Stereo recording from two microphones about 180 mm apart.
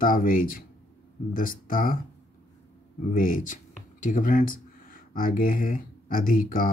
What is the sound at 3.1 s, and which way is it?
Speech, 50° left (ahead or behind).